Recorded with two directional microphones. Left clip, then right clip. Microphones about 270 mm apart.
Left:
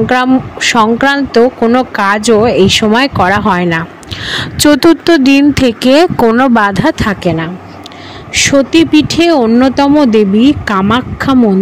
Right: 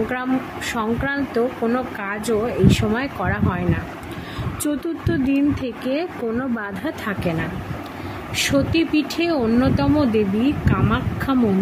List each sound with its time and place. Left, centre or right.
0.1 s speech: left